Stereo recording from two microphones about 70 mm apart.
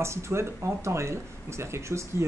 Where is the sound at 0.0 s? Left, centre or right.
Right.